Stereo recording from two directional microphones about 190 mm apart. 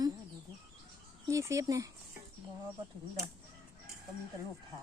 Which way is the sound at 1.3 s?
15° right (ahead or behind).